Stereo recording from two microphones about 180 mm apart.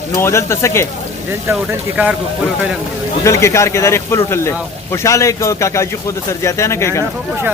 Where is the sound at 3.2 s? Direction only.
15° left (ahead or behind).